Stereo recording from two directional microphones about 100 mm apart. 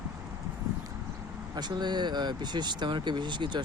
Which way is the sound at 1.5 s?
45° right (ahead or behind).